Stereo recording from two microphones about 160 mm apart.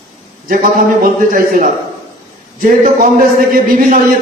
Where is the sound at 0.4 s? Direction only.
60° right (ahead or behind).